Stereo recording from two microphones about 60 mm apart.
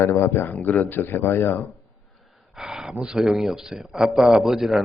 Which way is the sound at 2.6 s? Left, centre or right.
Centre.